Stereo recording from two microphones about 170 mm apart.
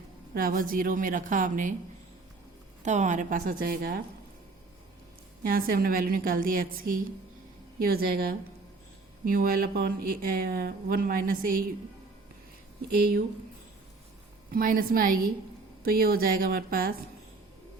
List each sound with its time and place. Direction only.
0.3 s a woman's voice: 55° right (ahead or behind)
2.8 s a woman's voice: 45° right (ahead or behind); by 4.0 s 60° right (ahead or behind)
5.4 s speech: 55° right (ahead or behind)
12.9 s speech: 65° right (ahead or behind)
14.5 s speech: 55° right (ahead or behind)